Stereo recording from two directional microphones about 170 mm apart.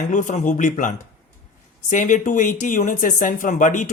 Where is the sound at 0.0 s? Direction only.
50° left (ahead or behind).